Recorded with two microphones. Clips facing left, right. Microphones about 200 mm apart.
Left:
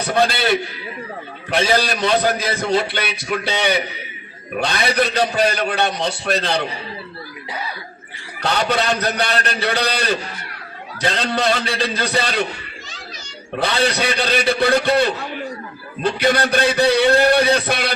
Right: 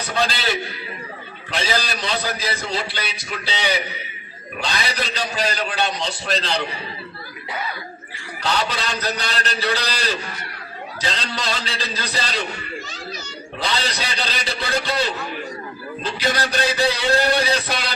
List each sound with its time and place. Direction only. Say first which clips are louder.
0.1 s a man's voice: left 6 dB; 55° left (ahead or behind)
8.4 s a man's voice: left 4 dB; 55° left (ahead or behind)
13.6 s a man's voice: left 7 dB; 55° left (ahead or behind)